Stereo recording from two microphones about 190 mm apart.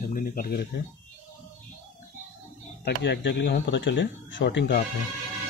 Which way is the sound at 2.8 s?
65° left (ahead or behind).